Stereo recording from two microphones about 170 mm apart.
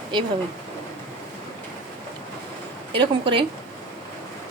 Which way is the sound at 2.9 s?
30° right (ahead or behind).